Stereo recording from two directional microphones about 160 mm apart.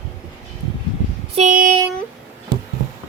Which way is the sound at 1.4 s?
55° right (ahead or behind).